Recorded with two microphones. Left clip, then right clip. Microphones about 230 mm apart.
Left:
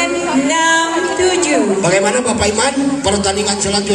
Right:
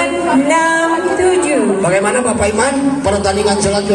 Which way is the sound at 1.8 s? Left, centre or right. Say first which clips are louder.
Even; left.